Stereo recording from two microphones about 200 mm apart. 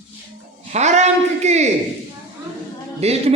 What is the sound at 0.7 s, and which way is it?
Speech, 35° right (ahead or behind).